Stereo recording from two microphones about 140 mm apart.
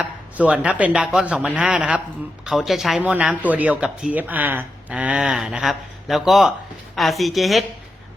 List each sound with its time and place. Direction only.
0.0 s a man's voice: 10° right (ahead or behind)